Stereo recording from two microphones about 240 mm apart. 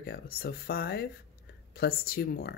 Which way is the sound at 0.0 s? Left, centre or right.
Left.